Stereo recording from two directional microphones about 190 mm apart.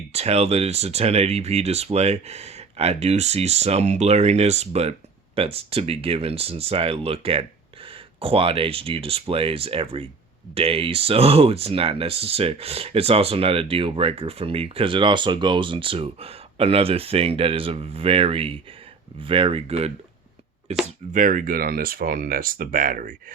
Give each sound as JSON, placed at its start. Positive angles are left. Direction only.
{"t": 0.1, "sound": "speech", "side_deg": -35}
{"t": 21.1, "sound": "speech", "side_deg": -45}